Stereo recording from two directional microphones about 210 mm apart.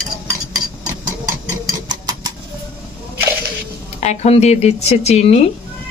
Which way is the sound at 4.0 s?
30° left (ahead or behind).